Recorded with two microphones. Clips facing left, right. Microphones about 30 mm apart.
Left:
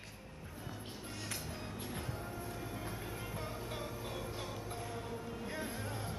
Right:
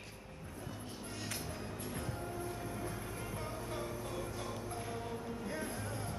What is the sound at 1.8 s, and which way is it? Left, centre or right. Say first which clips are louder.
Music: right 2 dB; centre.